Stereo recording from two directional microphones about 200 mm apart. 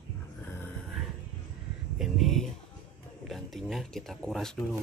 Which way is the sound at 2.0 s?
Centre (ahead or behind).